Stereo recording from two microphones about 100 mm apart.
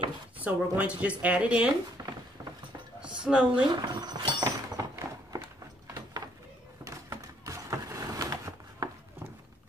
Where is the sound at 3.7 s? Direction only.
45° right (ahead or behind).